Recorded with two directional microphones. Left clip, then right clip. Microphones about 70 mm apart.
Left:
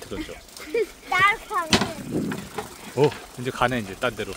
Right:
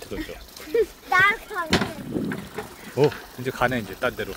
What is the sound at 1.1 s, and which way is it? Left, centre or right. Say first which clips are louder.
Speech: right 1 dB; centre.